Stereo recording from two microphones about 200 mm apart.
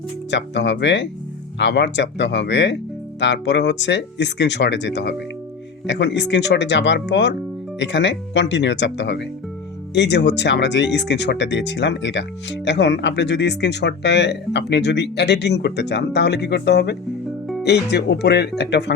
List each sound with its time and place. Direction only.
0.3 s speech: 60° left (ahead or behind)